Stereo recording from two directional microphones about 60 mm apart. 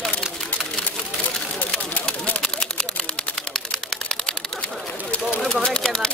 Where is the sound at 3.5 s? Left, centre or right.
Centre.